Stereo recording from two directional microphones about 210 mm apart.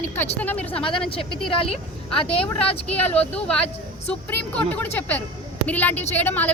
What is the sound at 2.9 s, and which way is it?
A woman's voice, 5° left (ahead or behind).